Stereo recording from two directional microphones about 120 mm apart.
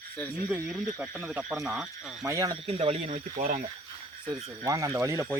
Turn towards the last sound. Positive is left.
turn(degrees=-25)  # may be behind; listen again after turning